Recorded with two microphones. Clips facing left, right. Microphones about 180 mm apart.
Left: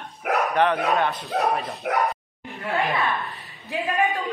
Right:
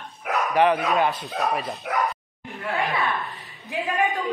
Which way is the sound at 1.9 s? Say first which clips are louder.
Left 3 dB; 55° left (ahead or behind).